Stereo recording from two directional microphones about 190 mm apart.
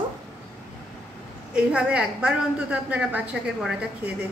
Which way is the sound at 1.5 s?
5° right (ahead or behind).